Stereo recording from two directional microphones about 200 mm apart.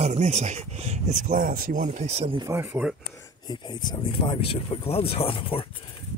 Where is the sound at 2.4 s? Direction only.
10° right (ahead or behind).